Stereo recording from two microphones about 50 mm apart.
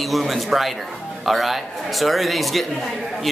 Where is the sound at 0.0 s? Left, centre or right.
Centre.